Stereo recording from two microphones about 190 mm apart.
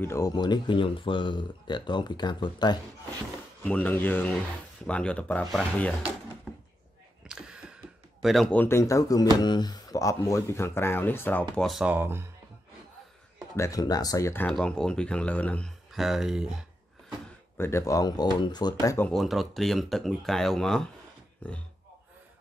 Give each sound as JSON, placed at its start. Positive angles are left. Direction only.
{"t": 0.0, "sound": "speech", "side_deg": 15}
{"t": 3.6, "sound": "speech", "side_deg": 5}
{"t": 7.2, "sound": "speech", "side_deg": -5}
{"t": 13.6, "sound": "speech", "side_deg": 20}
{"t": 17.6, "sound": "speech", "side_deg": 15}
{"t": 19.0, "sound": "speech", "side_deg": 0}